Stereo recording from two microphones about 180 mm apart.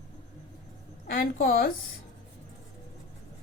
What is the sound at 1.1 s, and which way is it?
Speech, 55° left (ahead or behind).